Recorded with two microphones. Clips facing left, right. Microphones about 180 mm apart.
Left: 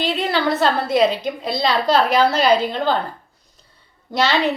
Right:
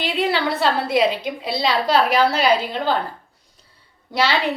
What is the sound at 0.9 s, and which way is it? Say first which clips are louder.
Speech: left 2 dB; 10° right (ahead or behind).